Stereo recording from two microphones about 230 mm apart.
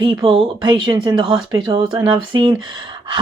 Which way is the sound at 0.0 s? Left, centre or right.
Centre.